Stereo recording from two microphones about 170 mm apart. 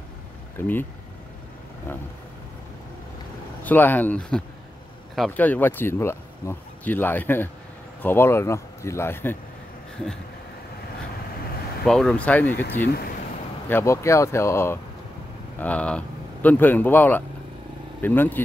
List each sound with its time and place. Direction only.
0.6 s speech: 10° left (ahead or behind)
1.9 s speech: 10° left (ahead or behind)
3.6 s speech: 10° left (ahead or behind)
11.8 s speech: 5° left (ahead or behind)
13.7 s speech: 15° left (ahead or behind)